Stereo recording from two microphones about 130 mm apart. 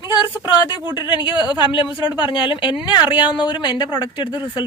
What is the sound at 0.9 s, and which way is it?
Speech, 40° left (ahead or behind).